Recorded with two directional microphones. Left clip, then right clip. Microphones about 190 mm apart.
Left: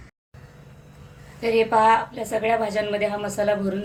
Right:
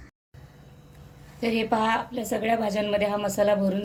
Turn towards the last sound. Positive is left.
turn(degrees=-35)  # may be behind; listen again after turning